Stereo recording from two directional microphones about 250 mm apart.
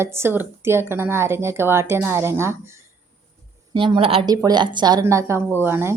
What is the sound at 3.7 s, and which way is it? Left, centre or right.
Speech, centre.